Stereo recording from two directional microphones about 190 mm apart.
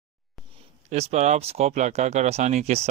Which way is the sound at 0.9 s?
35° right (ahead or behind).